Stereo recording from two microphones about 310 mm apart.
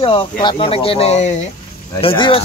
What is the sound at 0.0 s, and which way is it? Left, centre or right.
Speech, centre.